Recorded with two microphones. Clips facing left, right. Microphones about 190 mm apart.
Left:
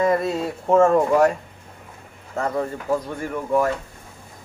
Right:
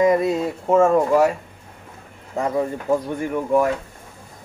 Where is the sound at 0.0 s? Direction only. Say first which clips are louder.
Right 3 dB; 15° right (ahead or behind).